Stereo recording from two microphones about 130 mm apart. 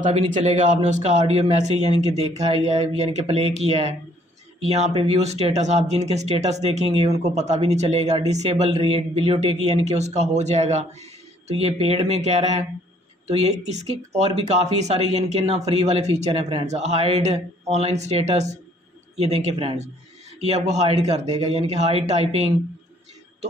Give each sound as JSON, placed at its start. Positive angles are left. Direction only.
{"t": 0.0, "sound": "speech", "side_deg": -65}